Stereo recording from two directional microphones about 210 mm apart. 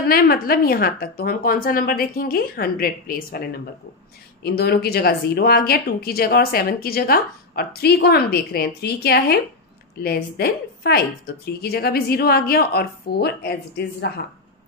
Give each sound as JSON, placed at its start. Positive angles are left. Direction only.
{"t": 0.0, "sound": "speech", "side_deg": 45}